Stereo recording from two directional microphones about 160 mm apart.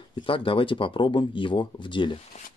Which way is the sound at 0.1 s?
35° left (ahead or behind).